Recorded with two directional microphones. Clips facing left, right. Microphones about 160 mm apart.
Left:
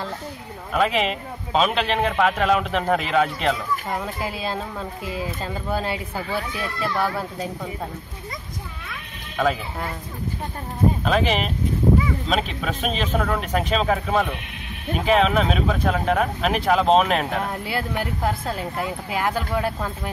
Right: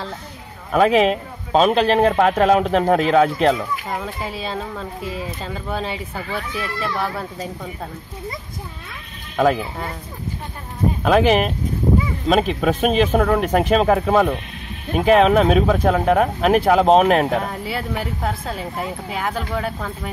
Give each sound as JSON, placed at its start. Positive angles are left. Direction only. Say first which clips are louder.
{"t": 0.7, "sound": "a man's voice", "louder": "right 7 dB", "side_deg": -45}
{"t": 3.9, "sound": "speech", "louder": "right 1 dB", "side_deg": 0}
{"t": 11.1, "sound": "a man's voice", "louder": "right 6 dB", "side_deg": -55}
{"t": 17.5, "sound": "speech", "louder": "right 1 dB", "side_deg": 0}